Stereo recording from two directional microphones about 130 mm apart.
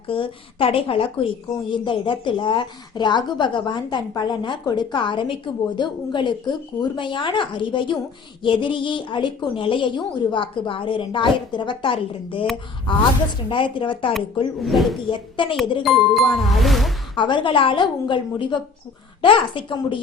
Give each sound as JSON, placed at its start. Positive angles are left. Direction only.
{"t": 0.1, "sound": "a woman's voice", "side_deg": 45}
{"t": 14.6, "sound": "speech", "side_deg": 0}
{"t": 15.0, "sound": "a woman's voice", "side_deg": 40}
{"t": 15.8, "sound": "speech", "side_deg": 0}
{"t": 17.2, "sound": "a woman's voice", "side_deg": 35}